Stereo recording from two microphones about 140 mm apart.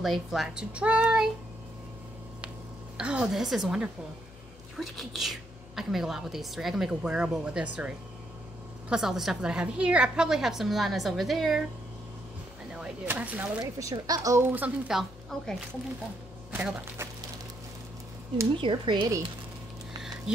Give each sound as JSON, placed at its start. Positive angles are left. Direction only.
{"t": 0.0, "sound": "a woman's voice", "side_deg": 0}
{"t": 3.0, "sound": "a woman's voice", "side_deg": -5}
{"t": 12.7, "sound": "speech", "side_deg": -10}
{"t": 13.6, "sound": "speech", "side_deg": -25}
{"t": 16.5, "sound": "speech", "side_deg": -15}
{"t": 18.6, "sound": "speech", "side_deg": -35}